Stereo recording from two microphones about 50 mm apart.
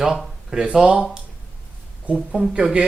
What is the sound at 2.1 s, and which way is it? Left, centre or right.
Speech, centre.